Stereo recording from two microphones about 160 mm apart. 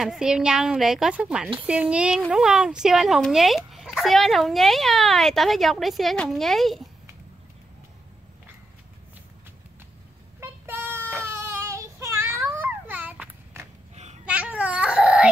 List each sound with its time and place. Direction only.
0.0 s speech: 5° right (ahead or behind)
10.4 s child singing: 15° right (ahead or behind)
13.9 s babbling: 45° right (ahead or behind)
14.2 s babbling: 10° right (ahead or behind)